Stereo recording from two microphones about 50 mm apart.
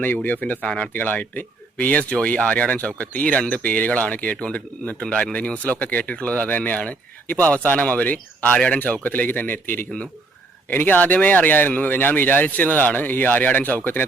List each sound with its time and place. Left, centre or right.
0.2 s speech: left
8.5 s speech: left
8.8 s speech: left